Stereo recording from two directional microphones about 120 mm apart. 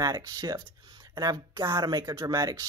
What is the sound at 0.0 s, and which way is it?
Speech, 35° right (ahead or behind).